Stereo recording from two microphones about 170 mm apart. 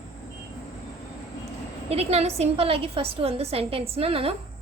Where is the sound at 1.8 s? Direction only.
40° right (ahead or behind).